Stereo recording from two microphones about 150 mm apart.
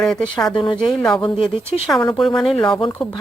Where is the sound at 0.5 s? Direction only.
30° left (ahead or behind).